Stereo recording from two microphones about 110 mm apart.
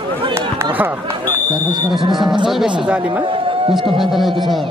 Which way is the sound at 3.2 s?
50° right (ahead or behind).